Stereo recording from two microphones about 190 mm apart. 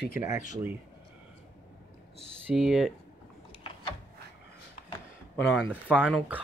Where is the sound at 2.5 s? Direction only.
Centre (ahead or behind).